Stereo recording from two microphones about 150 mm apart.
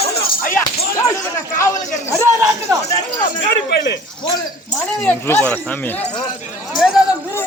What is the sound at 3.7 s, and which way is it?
Speech, 90° left.